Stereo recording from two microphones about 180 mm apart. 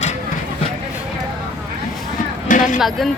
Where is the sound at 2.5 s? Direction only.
45° left (ahead or behind).